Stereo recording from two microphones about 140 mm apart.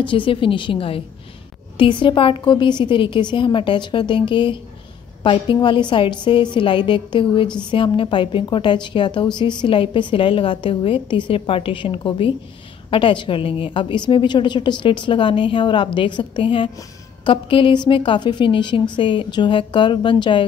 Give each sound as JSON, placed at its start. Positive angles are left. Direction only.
{"t": 0.0, "sound": "a woman's voice", "side_deg": 35}